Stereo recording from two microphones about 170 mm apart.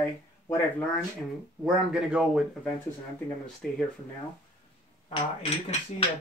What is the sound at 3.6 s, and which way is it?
Speech, centre (ahead or behind).